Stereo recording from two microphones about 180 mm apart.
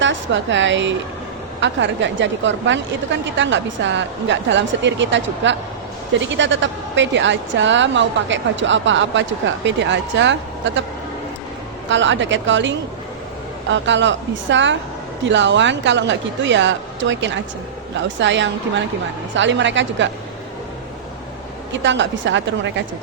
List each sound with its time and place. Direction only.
0.0 s a woman's voice: 90° right
11.9 s a woman's voice: 90° right
21.7 s a woman's voice: 90° right